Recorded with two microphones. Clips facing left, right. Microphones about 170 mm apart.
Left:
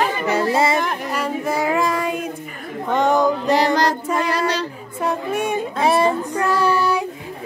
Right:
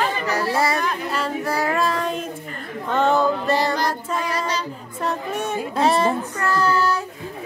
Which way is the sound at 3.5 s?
85° left.